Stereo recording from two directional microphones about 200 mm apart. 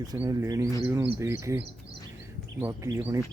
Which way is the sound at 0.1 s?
20° right (ahead or behind).